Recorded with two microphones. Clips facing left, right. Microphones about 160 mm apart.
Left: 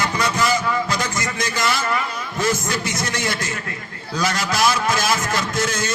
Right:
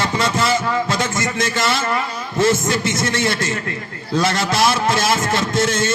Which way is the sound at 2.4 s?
25° right (ahead or behind).